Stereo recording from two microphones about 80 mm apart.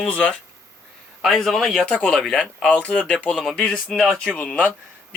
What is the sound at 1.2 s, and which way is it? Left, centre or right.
A man's voice, centre.